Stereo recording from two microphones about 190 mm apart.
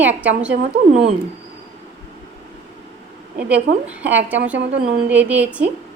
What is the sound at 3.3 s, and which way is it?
A woman's voice, 5° right (ahead or behind).